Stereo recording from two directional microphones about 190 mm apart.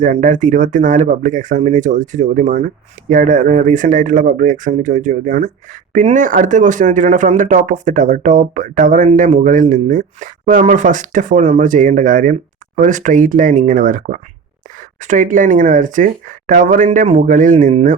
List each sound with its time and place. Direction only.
0.0 s speech: 40° right (ahead or behind)